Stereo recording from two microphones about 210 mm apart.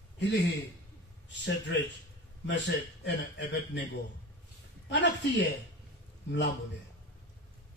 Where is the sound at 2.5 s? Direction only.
55° left (ahead or behind).